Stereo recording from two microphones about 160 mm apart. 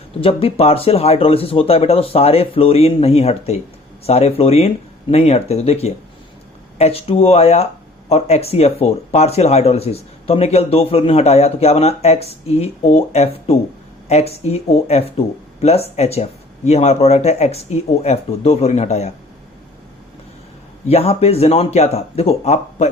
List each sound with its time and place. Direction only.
0.2 s speech: 35° left (ahead or behind)
20.8 s speech: 40° left (ahead or behind)